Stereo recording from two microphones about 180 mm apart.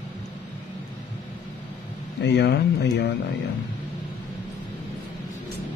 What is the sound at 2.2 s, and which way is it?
Speech, 70° left (ahead or behind).